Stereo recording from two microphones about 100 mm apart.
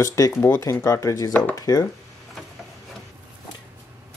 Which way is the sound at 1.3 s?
15° left (ahead or behind).